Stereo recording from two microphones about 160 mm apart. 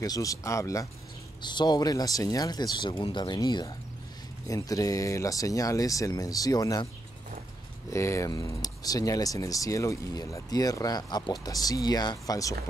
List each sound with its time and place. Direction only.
0.0 s speech: 20° left (ahead or behind)
7.9 s speech: 20° left (ahead or behind)